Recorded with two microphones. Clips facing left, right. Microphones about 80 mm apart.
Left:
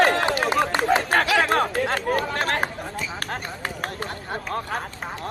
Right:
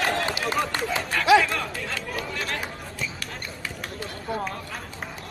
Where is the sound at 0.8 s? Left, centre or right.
Left.